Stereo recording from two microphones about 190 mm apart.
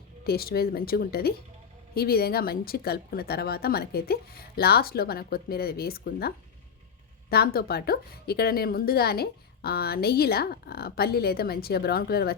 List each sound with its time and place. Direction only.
0.3 s a woman's voice: 55° left (ahead or behind)